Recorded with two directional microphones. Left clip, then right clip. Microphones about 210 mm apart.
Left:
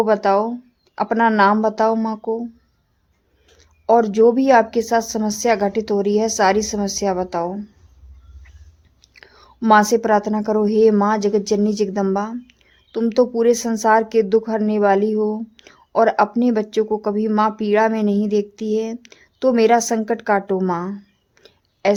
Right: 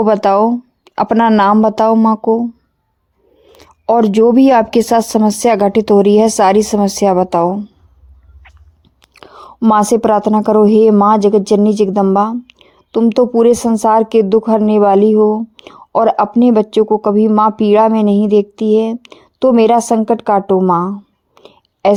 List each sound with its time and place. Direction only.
0.0 s speech: 35° right (ahead or behind)
3.6 s speech: 35° right (ahead or behind)
9.0 s speech: 30° right (ahead or behind)
21.3 s clicking: 25° right (ahead or behind)